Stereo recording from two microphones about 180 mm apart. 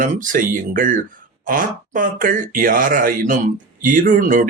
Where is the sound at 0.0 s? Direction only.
45° right (ahead or behind).